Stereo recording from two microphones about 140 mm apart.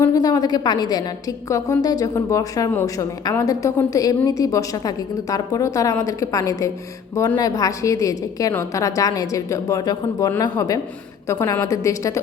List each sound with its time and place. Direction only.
0.0 s a woman's voice: 25° left (ahead or behind)